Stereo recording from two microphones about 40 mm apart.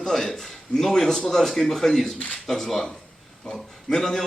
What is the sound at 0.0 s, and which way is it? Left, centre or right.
A man's voice, centre.